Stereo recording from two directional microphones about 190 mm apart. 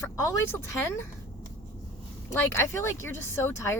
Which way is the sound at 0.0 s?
15° left (ahead or behind).